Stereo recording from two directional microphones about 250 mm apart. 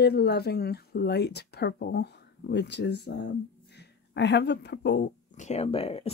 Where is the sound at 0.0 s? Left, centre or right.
Left.